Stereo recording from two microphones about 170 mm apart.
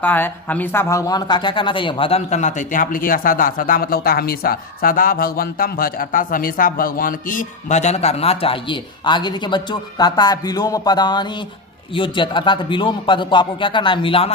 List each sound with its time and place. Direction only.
0.0 s a man's voice: 10° left (ahead or behind); by 14.3 s 35° left (ahead or behind)